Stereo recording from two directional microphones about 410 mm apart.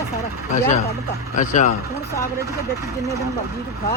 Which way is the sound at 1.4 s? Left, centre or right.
Centre.